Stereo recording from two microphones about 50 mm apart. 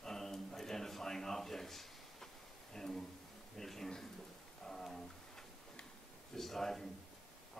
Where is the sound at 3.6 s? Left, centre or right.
Centre.